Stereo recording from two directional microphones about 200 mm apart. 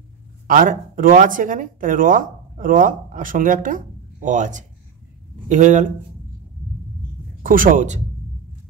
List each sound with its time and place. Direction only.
0.5 s speech: 45° right (ahead or behind)
7.4 s speech: 45° right (ahead or behind)